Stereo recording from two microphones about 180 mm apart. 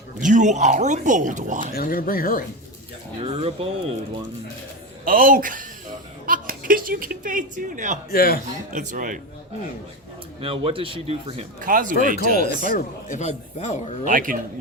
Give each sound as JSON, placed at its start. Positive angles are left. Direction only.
{"t": 0.2, "sound": "speech", "side_deg": -45}
{"t": 1.7, "sound": "speech", "side_deg": 55}
{"t": 3.2, "sound": "a man's voice", "side_deg": -30}
{"t": 5.0, "sound": "a woman's voice", "side_deg": -50}
{"t": 8.1, "sound": "a man's voice", "side_deg": 55}
{"t": 8.7, "sound": "speech", "side_deg": -45}
{"t": 10.4, "sound": "a man's voice", "side_deg": -30}
{"t": 11.6, "sound": "speech", "side_deg": -50}
{"t": 12.5, "sound": "speech", "side_deg": 50}
{"t": 14.0, "sound": "speech", "side_deg": -50}